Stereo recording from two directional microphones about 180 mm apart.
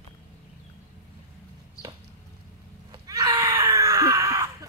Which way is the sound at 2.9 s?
20° right (ahead or behind).